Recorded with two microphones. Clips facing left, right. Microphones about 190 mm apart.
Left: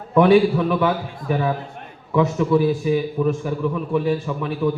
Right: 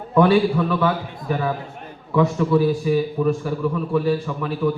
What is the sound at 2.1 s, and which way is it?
A man's voice, 15° left (ahead or behind).